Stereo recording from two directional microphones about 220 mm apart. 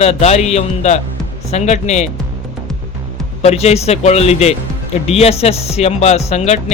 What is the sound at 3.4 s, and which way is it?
A man's voice, 30° left (ahead or behind).